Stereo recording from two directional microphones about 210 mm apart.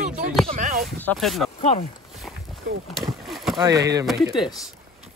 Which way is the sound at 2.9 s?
Centre (ahead or behind).